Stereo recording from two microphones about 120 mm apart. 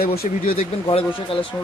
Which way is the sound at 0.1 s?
55° left (ahead or behind).